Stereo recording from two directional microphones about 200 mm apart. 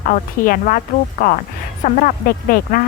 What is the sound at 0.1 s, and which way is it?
A woman's voice, 40° left (ahead or behind).